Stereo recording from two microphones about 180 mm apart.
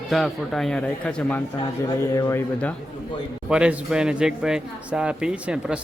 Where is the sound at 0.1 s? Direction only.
Centre (ahead or behind).